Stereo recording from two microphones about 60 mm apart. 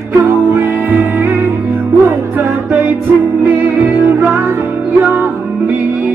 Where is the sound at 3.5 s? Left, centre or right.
Right.